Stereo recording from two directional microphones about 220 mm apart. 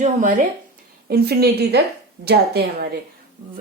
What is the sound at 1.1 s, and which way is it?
A woman's voice, 45° right (ahead or behind).